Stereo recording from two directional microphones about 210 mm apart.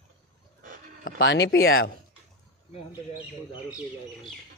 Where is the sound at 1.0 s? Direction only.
55° left (ahead or behind).